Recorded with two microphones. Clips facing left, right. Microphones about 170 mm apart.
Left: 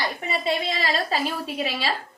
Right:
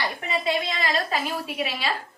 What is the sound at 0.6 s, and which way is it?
A woman's voice, 30° left (ahead or behind).